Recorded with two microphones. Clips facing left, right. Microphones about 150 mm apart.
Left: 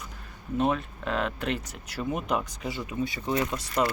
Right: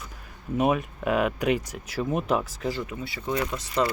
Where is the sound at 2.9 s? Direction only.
20° left (ahead or behind).